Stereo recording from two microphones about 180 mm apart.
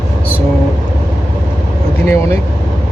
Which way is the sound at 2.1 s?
15° left (ahead or behind).